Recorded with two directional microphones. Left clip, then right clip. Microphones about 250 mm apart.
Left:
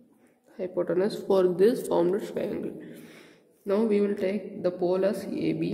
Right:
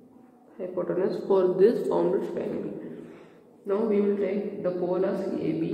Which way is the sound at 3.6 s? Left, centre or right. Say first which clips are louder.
Even; left.